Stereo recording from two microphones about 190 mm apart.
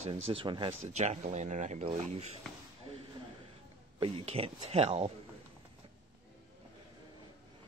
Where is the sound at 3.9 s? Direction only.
30° right (ahead or behind).